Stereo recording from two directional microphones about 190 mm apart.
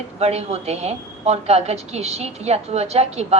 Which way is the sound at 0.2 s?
35° right (ahead or behind).